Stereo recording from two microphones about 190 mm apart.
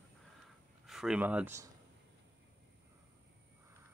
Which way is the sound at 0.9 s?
5° right (ahead or behind).